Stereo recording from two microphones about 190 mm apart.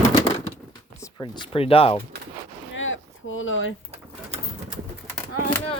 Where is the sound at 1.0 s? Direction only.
20° left (ahead or behind).